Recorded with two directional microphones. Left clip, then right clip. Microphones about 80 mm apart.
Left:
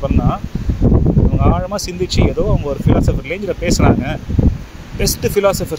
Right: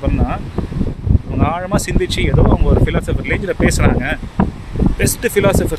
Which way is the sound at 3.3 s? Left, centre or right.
Right.